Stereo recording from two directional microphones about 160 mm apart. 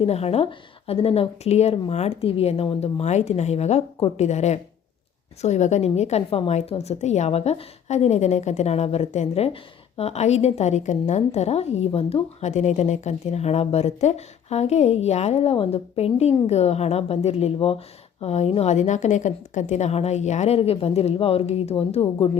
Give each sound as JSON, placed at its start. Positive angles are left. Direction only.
{"t": 0.0, "sound": "a woman's voice", "side_deg": 40}